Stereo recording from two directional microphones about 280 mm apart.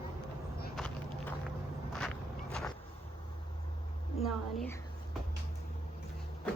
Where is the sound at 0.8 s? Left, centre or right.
Centre.